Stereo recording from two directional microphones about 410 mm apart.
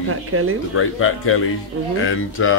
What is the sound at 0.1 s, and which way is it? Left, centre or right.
Speech, right.